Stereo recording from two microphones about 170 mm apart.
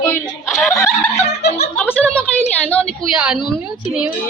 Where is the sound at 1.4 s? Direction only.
80° left.